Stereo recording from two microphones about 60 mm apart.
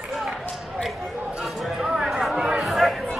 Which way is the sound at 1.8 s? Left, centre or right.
Centre.